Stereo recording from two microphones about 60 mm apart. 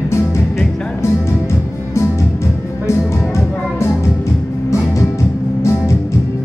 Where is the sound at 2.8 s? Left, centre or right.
Left.